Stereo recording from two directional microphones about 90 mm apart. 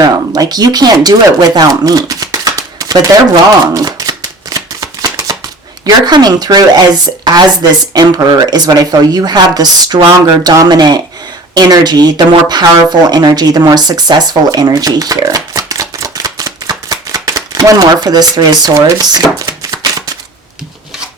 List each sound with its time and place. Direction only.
0.0 s speech: 45° right (ahead or behind)
3.8 s shuffling cards: 45° right (ahead or behind)
5.8 s speech: 50° right (ahead or behind)
15.5 s a sound: 40° right (ahead or behind)